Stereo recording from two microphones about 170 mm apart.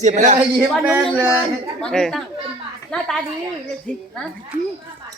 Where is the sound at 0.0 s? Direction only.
45° right (ahead or behind).